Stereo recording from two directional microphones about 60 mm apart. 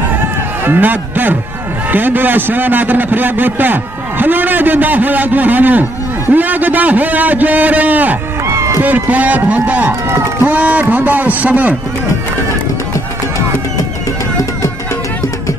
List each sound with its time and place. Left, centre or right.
0.7 s a man's voice: right
8.5 s a sound: right
8.8 s a man's voice: right